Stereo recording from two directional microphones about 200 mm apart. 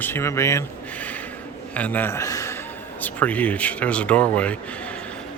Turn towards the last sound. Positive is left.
turn(degrees=5)  # may be behind; listen again after turning